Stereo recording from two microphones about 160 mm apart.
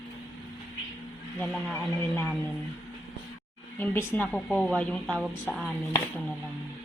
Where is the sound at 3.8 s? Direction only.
15° left (ahead or behind).